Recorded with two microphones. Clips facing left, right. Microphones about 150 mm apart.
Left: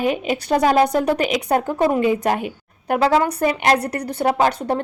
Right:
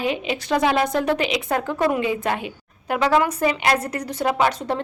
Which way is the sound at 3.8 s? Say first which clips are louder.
Left 3 dB; 60° left (ahead or behind).